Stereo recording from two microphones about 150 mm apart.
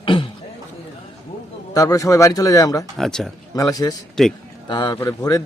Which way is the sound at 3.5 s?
25° left (ahead or behind).